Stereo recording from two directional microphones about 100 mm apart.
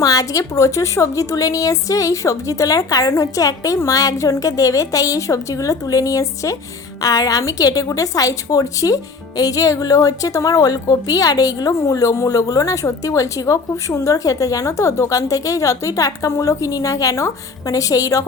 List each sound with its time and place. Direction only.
0.0 s a woman's voice: 35° left (ahead or behind)